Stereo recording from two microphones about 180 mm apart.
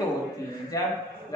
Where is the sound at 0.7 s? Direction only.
20° left (ahead or behind).